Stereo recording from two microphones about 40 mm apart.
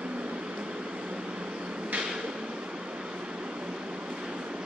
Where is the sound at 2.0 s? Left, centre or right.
Right.